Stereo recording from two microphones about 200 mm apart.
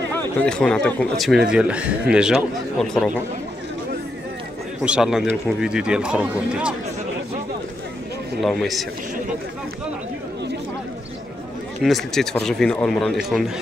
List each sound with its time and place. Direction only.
0.4 s speech: 5° left (ahead or behind)
4.8 s speech: 5° right (ahead or behind)
8.4 s speech: centre (ahead or behind)
11.8 s speech: centre (ahead or behind)